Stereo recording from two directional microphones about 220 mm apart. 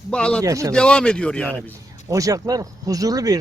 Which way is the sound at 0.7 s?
5° left (ahead or behind).